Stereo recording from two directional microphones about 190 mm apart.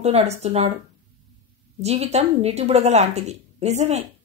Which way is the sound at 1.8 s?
35° right (ahead or behind).